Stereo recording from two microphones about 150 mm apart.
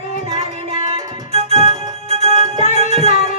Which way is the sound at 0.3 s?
40° right (ahead or behind).